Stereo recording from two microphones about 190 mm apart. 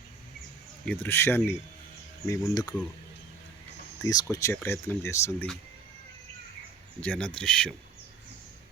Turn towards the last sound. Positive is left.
turn(degrees=5)  # may be behind; listen again after turning